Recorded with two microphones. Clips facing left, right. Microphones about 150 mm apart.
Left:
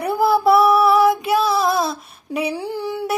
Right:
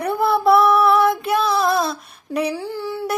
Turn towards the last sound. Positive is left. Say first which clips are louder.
# left 1 dB
turn(degrees=15)  # may be behind; listen again after turning